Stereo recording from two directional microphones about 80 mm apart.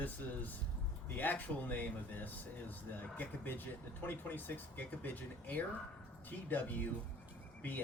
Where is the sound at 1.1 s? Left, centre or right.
Left.